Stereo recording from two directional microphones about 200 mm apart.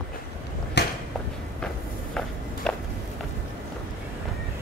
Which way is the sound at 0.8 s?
60° left (ahead or behind).